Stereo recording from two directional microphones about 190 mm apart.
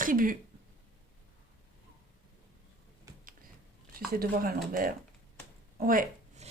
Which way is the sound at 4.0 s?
50° right (ahead or behind).